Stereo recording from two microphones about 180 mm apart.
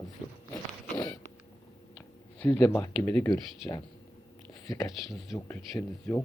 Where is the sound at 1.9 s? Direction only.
10° left (ahead or behind).